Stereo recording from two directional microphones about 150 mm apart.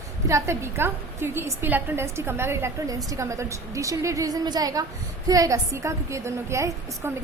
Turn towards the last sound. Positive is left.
turn(degrees=-20)  # may be behind; listen again after turning